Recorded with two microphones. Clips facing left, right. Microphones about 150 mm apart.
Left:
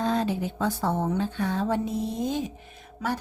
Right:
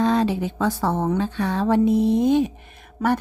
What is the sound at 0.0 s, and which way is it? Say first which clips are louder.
A woman's voice: right 6 dB; 90° right.